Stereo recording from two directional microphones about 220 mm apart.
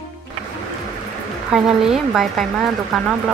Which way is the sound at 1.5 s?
5° right (ahead or behind).